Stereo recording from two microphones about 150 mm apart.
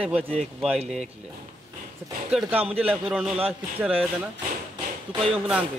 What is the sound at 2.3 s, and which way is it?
A man's voice, 5° right (ahead or behind).